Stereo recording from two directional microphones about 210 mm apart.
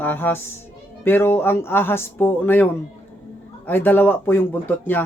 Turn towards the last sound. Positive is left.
turn(degrees=10)  # may be behind; listen again after turning